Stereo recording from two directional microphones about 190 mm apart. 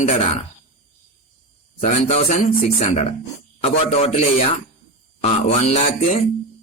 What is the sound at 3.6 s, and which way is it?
Speech, 30° left (ahead or behind).